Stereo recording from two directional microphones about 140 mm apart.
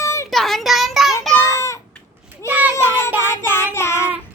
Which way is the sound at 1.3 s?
20° left (ahead or behind).